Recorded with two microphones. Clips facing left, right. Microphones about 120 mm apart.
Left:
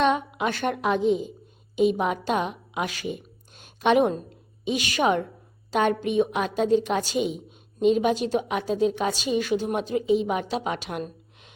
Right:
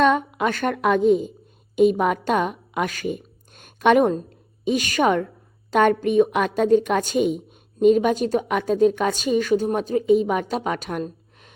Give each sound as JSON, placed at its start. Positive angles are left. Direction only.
{"t": 0.0, "sound": "a woman's voice", "side_deg": -45}